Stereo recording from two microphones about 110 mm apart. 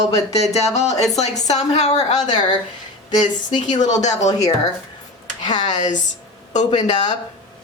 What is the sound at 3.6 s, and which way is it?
Speech, 90° left.